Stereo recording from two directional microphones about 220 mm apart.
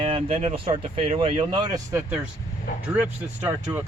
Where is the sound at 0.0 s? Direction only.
25° right (ahead or behind); by 3.8 s 5° right (ahead or behind).